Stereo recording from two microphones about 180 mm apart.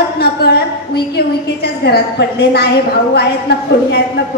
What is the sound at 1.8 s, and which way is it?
Speech, 60° left (ahead or behind).